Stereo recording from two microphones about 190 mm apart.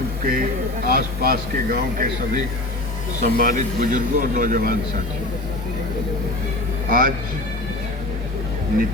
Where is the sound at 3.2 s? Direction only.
50° right (ahead or behind).